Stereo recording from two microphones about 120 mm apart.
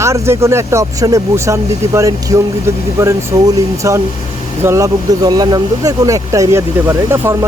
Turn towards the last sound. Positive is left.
turn(degrees=-25)  # may be behind; listen again after turning